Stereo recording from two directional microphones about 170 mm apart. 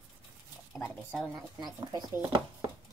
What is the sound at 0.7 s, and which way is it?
Speech, centre (ahead or behind).